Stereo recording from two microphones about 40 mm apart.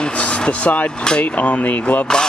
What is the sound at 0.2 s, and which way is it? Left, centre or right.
A man's voice, left.